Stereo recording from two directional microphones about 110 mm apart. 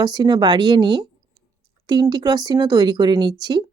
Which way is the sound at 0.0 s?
40° right (ahead or behind).